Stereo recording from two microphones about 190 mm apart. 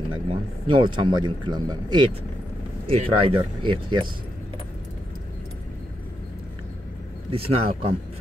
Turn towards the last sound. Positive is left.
turn(degrees=-30)  # may be behind; listen again after turning